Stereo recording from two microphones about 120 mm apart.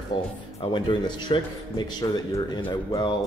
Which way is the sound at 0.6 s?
40° left (ahead or behind).